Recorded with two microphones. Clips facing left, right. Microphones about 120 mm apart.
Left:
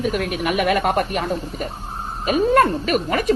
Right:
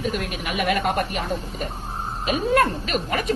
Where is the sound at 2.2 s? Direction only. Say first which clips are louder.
Left 4 dB; 45° left (ahead or behind).